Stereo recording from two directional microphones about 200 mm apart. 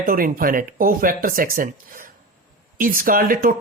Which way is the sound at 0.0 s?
45° right (ahead or behind).